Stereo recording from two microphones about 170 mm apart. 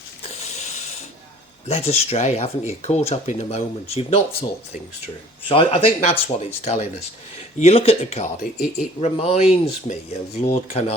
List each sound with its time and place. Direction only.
0.2 s a sound: 40° left (ahead or behind)
1.6 s speech: 40° left (ahead or behind)
5.5 s speech: 30° left (ahead or behind)